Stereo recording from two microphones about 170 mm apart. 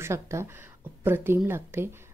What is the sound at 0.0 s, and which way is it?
Speech, 15° right (ahead or behind).